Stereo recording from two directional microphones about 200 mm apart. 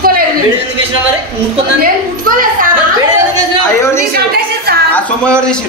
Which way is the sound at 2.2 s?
45° right (ahead or behind).